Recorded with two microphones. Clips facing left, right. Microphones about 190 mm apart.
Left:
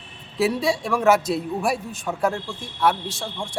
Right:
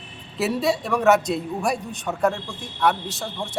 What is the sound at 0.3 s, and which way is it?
A man's voice, centre (ahead or behind).